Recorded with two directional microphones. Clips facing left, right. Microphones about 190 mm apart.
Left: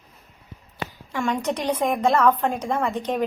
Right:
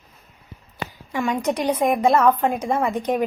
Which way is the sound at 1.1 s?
10° right (ahead or behind).